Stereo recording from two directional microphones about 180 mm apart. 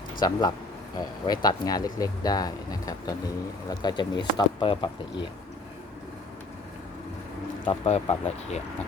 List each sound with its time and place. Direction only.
0.2 s speech: 25° left (ahead or behind)
7.6 s speech: 35° left (ahead or behind)